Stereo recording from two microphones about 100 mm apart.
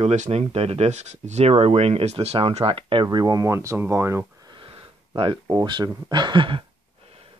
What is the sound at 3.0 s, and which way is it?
Speech, 40° right (ahead or behind).